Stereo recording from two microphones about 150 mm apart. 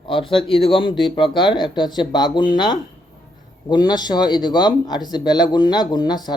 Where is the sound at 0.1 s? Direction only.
35° left (ahead or behind).